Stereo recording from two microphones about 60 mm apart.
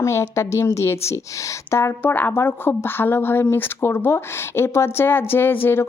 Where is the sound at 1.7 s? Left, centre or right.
Left.